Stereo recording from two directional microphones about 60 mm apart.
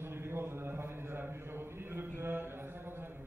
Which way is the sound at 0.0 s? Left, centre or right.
Right.